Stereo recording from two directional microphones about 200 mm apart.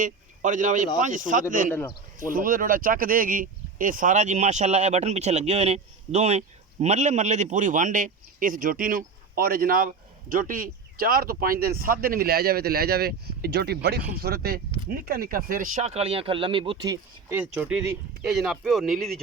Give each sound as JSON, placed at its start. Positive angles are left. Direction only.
{"t": 0.0, "sound": "speech", "side_deg": -40}